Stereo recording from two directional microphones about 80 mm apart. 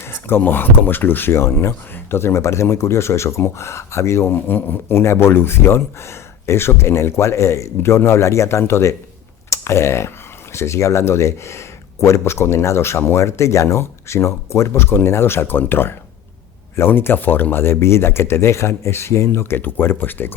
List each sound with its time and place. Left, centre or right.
0.0 s speech: left
4.3 s speech: left